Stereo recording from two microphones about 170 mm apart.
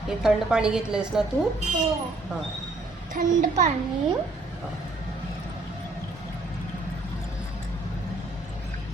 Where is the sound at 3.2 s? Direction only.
45° right (ahead or behind).